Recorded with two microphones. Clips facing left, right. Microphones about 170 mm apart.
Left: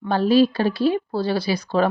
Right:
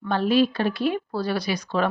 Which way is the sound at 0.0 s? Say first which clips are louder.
Left 4 dB; 35° left (ahead or behind).